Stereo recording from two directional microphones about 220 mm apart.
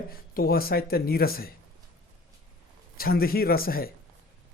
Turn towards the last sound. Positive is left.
turn(degrees=45)  # may be behind; listen again after turning